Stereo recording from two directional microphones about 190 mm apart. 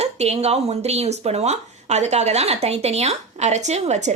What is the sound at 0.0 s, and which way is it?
A woman's voice, 35° right (ahead or behind).